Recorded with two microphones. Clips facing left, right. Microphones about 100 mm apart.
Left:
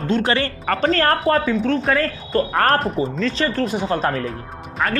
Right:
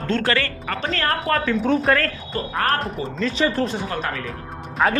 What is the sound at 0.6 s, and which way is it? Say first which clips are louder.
Speech: left 10 dB; 40° left (ahead or behind).